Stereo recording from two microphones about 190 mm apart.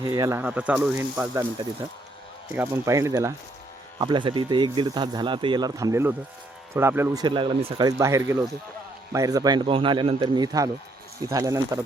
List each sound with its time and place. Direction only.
0.0 s speech: 20° right (ahead or behind)
2.6 s speech: 15° right (ahead or behind)